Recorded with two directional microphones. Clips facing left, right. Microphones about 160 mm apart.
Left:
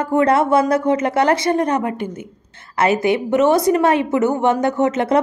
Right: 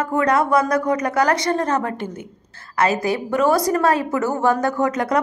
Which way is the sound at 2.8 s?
25° left (ahead or behind).